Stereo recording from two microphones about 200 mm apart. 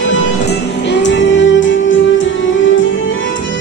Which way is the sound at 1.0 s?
65° left (ahead or behind).